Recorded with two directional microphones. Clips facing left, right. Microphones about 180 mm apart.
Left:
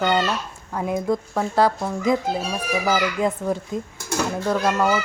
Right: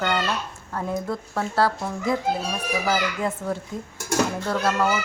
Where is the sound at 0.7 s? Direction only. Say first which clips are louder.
Left 5 dB; 15° left (ahead or behind).